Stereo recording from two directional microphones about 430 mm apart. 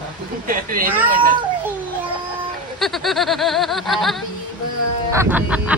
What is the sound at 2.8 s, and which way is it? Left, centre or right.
A woman's voice, centre.